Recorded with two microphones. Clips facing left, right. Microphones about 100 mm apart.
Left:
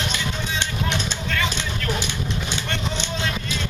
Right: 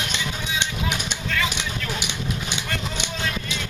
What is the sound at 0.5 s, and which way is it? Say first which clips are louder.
Vehicle: even; 10° right (ahead or behind).